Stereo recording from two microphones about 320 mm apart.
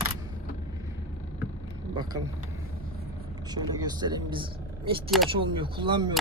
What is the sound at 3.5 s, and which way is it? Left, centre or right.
Speech, centre.